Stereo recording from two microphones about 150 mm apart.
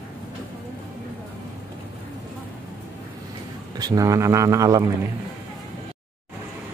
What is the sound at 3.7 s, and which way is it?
Speech, 25° right (ahead or behind).